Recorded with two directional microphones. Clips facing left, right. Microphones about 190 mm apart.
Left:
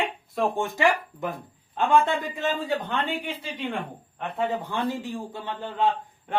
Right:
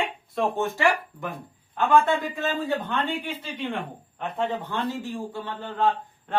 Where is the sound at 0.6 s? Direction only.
15° left (ahead or behind).